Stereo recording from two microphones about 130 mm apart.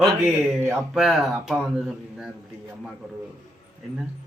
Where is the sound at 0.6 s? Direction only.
20° right (ahead or behind).